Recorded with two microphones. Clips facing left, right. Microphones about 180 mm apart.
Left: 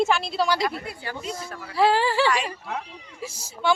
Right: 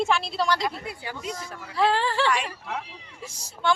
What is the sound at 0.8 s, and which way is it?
Speech, 15° right (ahead or behind).